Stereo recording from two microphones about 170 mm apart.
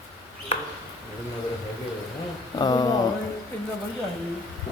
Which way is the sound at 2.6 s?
25° left (ahead or behind).